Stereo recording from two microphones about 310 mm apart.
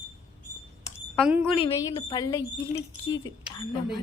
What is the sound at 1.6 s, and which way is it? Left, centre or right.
Speech, centre.